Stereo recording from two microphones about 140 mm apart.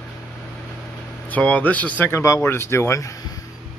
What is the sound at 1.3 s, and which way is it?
Speech, 10° left (ahead or behind).